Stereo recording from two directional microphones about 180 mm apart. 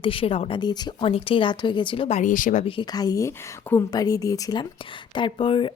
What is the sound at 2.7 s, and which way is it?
Speech, 25° left (ahead or behind).